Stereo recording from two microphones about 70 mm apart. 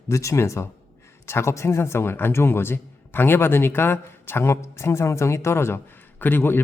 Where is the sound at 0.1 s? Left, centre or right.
Left.